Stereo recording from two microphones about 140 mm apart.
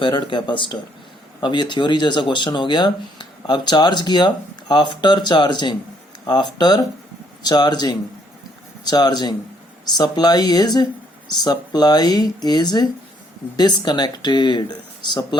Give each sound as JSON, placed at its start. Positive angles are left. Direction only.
{"t": 0.0, "sound": "speech", "side_deg": 35}